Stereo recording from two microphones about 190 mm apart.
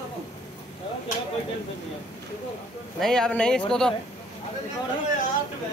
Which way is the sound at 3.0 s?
5° left (ahead or behind).